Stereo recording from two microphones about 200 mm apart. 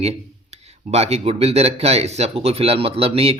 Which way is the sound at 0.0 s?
30° right (ahead or behind).